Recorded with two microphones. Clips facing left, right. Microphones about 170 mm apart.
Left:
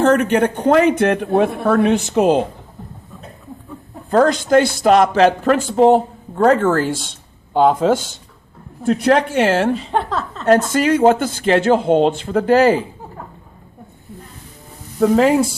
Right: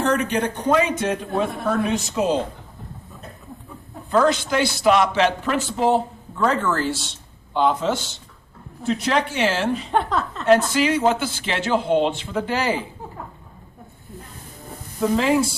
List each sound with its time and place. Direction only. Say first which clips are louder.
0.0 s a man's voice: left 7 dB; 60° left (ahead or behind)
4.1 s a man's voice: left 6 dB; 45° left (ahead or behind)
9.9 s a woman's voice: left 1 dB; centre (ahead or behind)
10.4 s a man's voice: left 3 dB; 45° left (ahead or behind)
15.0 s a man's voice: left 6 dB; 45° left (ahead or behind)